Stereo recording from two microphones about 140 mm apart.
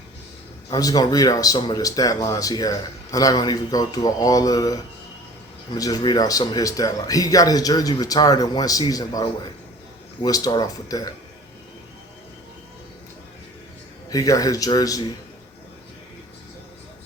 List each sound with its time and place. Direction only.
0.7 s speech: 25° left (ahead or behind)
10.2 s speech: 25° left (ahead or behind)
14.1 s speech: 25° left (ahead or behind)